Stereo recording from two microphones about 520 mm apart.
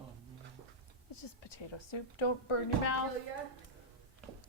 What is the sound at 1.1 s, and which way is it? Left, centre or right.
A woman's voice, left.